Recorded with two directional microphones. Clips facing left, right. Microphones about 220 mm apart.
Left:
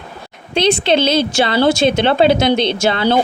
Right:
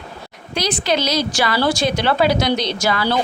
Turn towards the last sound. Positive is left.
turn(degrees=25)  # may be behind; listen again after turning